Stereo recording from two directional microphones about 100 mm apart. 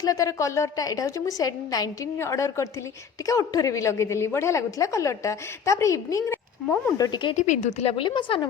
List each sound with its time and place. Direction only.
0.0 s a woman's voice: 35° left (ahead or behind)
2.1 s a woman's voice: 30° left (ahead or behind)
6.3 s speech: 20° left (ahead or behind)
7.0 s speech: 50° left (ahead or behind)
7.7 s a woman's voice: 85° left
8.0 s speech: 55° left (ahead or behind)